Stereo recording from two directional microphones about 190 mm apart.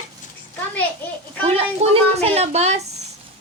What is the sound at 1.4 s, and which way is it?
A woman's voice, 35° right (ahead or behind).